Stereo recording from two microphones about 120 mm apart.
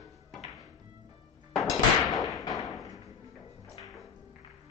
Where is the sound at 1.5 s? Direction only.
Centre (ahead or behind).